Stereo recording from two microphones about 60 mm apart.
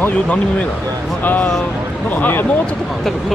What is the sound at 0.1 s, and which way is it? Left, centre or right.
Speech, centre.